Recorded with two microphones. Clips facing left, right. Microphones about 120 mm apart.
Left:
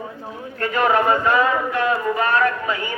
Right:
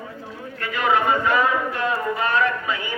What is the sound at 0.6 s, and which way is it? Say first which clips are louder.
Speech: left 3 dB; 45° left (ahead or behind).